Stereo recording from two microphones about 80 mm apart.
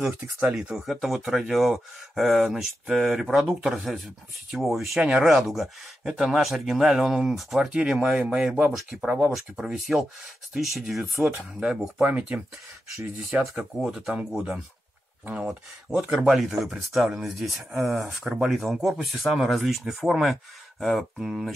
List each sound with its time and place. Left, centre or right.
0.2 s speech: centre
0.6 s speech: centre
12.0 s speech: right
13.3 s speech: centre